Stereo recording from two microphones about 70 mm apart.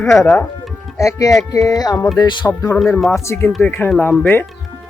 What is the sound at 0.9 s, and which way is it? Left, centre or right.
Speech, left.